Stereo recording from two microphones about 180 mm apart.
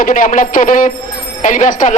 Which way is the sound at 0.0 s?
50° left (ahead or behind).